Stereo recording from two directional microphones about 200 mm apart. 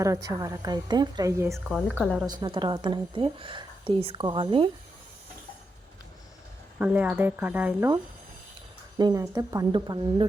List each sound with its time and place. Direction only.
0.0 s a woman's voice: 15° right (ahead or behind)
1.5 s a woman's voice: centre (ahead or behind)
2.2 s a woman's voice: 20° right (ahead or behind)
6.7 s a woman's voice: 5° right (ahead or behind)
9.0 s a woman's voice: 20° right (ahead or behind)